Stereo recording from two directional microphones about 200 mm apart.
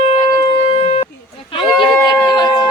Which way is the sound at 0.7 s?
30° left (ahead or behind).